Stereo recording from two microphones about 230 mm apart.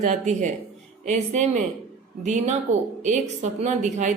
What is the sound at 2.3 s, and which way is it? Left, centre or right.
A woman's voice, right.